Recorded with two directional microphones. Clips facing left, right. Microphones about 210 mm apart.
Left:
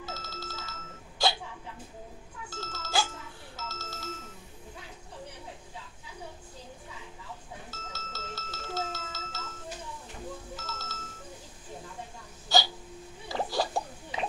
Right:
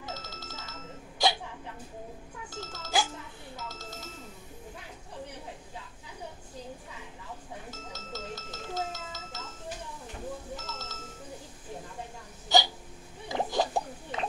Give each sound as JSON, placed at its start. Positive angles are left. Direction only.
{"t": 0.0, "sound": "ringtone", "side_deg": -15}
{"t": 2.5, "sound": "doorbell", "side_deg": -15}
{"t": 3.5, "sound": "a sound", "side_deg": -15}
{"t": 7.7, "sound": "music", "side_deg": -15}
{"t": 10.5, "sound": "music", "side_deg": -15}
{"t": 12.5, "sound": "hiccup", "side_deg": -20}
{"t": 13.3, "sound": "a sound", "side_deg": -20}